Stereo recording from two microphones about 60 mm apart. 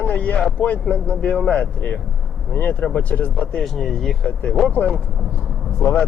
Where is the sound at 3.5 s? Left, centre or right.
Centre.